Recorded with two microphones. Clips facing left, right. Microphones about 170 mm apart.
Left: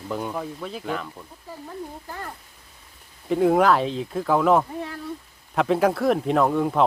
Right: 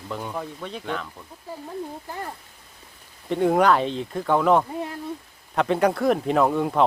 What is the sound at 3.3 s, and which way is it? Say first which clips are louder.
Speech: left 1 dB; centre (ahead or behind).